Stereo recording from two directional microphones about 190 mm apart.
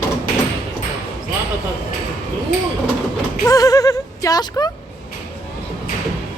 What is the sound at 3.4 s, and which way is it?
Speech, 20° left (ahead or behind).